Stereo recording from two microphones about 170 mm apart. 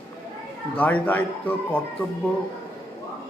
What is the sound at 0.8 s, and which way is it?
Speech, 10° left (ahead or behind).